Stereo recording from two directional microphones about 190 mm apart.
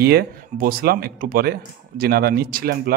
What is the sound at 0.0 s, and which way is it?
A man's voice, 55° right (ahead or behind).